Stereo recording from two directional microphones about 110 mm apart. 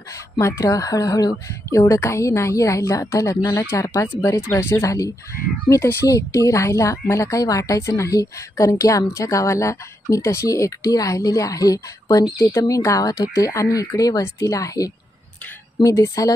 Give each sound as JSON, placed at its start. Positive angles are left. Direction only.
{"t": 0.1, "sound": "speech", "side_deg": 30}